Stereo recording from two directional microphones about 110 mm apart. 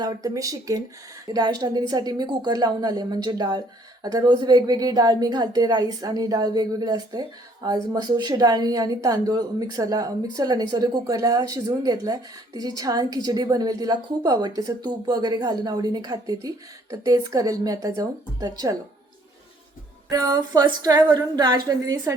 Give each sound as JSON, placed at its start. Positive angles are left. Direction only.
{"t": 0.0, "sound": "a woman's voice", "side_deg": -35}
{"t": 20.1, "sound": "a woman's voice", "side_deg": -35}